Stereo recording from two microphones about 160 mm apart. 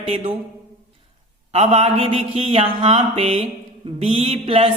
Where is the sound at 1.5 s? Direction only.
40° right (ahead or behind).